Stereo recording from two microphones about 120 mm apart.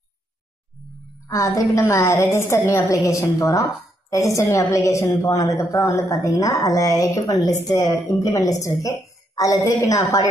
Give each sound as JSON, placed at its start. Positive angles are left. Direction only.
{"t": 1.2, "sound": "a woman's voice", "side_deg": 30}